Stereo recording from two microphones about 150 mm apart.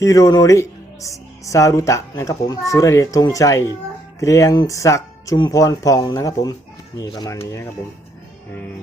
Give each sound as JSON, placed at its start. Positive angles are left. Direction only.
{"t": 0.0, "sound": "speech", "side_deg": 25}